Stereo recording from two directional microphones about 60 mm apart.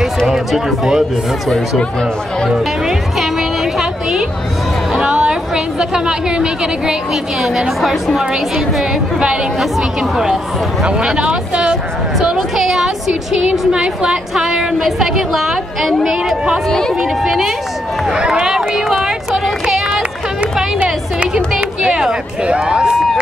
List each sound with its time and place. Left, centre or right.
0.3 s a woman's voice: centre
2.6 s a woman's voice: centre
4.9 s a sound: centre
7.4 s a woman's voice: centre
17.0 s speech: centre
21.5 s speech: centre